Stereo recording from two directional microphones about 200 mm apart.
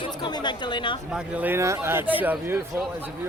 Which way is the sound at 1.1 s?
5° right (ahead or behind).